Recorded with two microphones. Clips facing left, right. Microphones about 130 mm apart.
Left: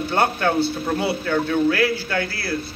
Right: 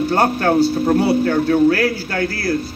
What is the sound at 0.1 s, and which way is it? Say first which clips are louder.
A man's voice: right 3 dB; 40° right (ahead or behind).